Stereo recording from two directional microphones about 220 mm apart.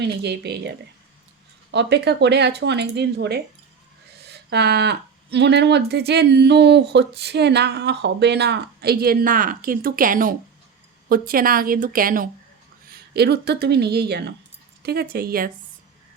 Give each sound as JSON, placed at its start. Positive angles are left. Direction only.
{"t": 0.0, "sound": "a woman's voice", "side_deg": -50}